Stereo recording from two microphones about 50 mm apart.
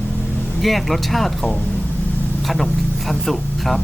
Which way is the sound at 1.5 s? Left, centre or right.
Left.